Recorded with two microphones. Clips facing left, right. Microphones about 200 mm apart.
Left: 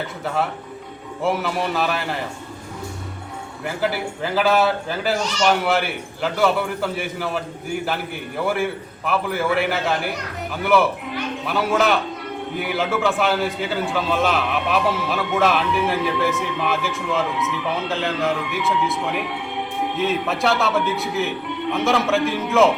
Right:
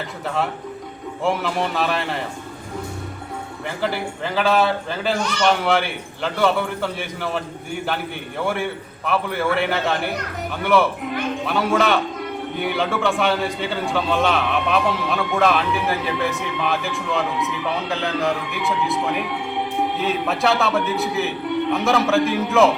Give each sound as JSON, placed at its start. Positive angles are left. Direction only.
{"t": 1.2, "sound": "a man's voice", "side_deg": 0}
{"t": 3.8, "sound": "a man's voice", "side_deg": 5}
{"t": 5.1, "sound": "speech", "side_deg": -55}
{"t": 5.5, "sound": "a man's voice", "side_deg": 5}
{"t": 8.4, "sound": "a man's voice", "side_deg": 0}